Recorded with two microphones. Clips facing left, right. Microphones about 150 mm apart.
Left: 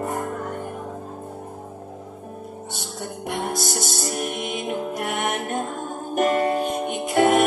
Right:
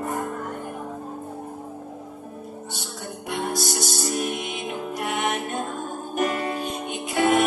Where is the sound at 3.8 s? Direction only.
55° left (ahead or behind).